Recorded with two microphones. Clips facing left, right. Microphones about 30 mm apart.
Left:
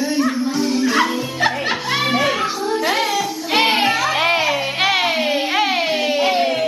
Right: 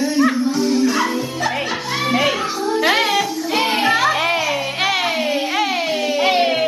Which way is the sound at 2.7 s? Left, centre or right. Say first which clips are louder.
Right 4 dB; centre.